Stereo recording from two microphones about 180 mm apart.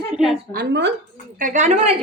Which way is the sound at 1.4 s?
45° right (ahead or behind).